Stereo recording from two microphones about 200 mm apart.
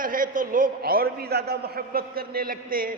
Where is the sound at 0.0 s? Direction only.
45° right (ahead or behind).